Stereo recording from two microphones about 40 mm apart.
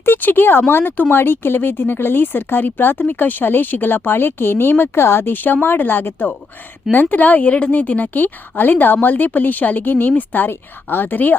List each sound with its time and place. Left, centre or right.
0.0 s speech: left
5.3 s a woman's voice: left
6.9 s a woman's voice: left
10.5 s speech: left